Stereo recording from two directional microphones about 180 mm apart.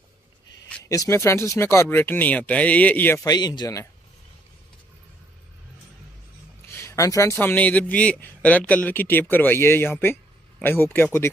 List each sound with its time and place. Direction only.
0.8 s a man's voice: 15° left (ahead or behind)
3.3 s speech: 20° left (ahead or behind)
6.7 s a man's voice: 15° left (ahead or behind)